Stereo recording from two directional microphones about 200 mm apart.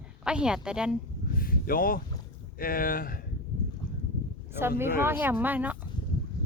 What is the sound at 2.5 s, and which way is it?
Speech, 45° left (ahead or behind).